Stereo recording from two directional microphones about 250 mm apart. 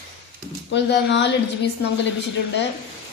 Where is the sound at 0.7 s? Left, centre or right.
Left.